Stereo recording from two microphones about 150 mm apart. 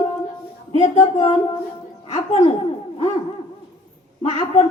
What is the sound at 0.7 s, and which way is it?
A woman's voice, 50° left (ahead or behind).